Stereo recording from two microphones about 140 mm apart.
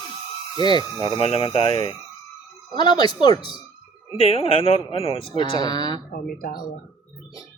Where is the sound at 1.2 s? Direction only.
45° left (ahead or behind).